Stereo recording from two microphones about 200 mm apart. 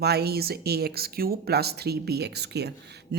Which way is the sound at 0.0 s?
55° right (ahead or behind).